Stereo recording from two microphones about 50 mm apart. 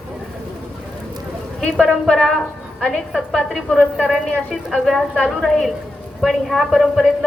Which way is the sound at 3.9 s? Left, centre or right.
Centre.